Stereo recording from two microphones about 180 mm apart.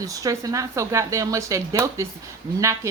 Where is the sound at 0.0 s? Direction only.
20° right (ahead or behind).